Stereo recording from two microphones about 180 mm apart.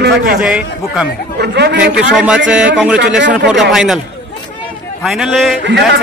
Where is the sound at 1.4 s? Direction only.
70° right (ahead or behind).